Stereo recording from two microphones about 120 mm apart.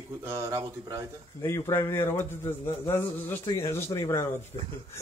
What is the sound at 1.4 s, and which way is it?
Speech, 20° left (ahead or behind).